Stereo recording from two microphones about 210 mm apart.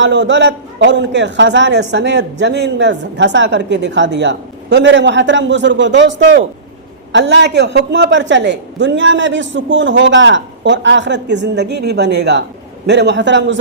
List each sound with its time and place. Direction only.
0.0 s a man's voice: 60° right (ahead or behind)